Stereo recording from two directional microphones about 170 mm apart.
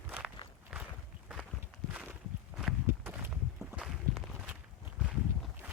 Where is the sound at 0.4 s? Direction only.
25° left (ahead or behind).